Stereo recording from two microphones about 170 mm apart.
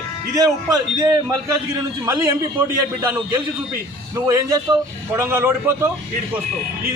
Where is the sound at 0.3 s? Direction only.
25° right (ahead or behind).